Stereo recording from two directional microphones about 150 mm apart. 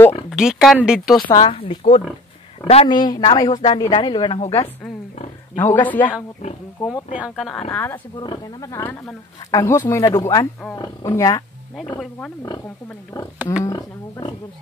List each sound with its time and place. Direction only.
0.3 s speech: 5° right (ahead or behind)
1.2 s speech: 30° left (ahead or behind)
2.9 s speech: 30° left (ahead or behind)
5.6 s a woman's voice: 15° left (ahead or behind)
7.2 s speech: 5° right (ahead or behind)
7.7 s a woman's voice: 10° left (ahead or behind)
8.2 s speech: 30° left (ahead or behind)
13.4 s speech: 5° right (ahead or behind)
13.7 s speech: 25° left (ahead or behind)